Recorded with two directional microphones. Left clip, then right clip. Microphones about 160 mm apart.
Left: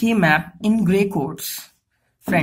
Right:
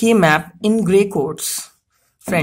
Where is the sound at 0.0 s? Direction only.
35° right (ahead or behind).